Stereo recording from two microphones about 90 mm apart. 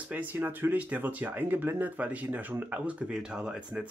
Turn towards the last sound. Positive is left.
turn(degrees=-10)  # may be behind; listen again after turning